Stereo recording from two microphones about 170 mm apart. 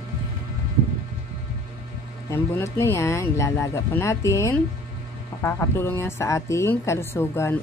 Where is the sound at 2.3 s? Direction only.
15° left (ahead or behind).